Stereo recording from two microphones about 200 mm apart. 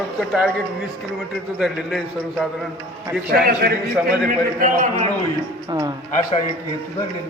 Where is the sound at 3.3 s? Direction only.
50° right (ahead or behind).